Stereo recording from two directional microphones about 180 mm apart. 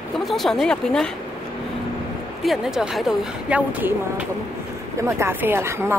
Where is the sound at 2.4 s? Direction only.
Centre (ahead or behind).